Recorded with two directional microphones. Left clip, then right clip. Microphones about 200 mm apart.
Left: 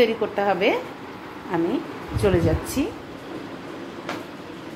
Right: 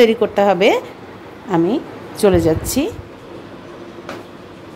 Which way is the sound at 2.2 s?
55° right (ahead or behind).